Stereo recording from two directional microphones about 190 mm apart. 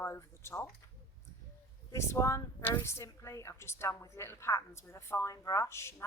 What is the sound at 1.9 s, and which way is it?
A woman's voice, 15° left (ahead or behind).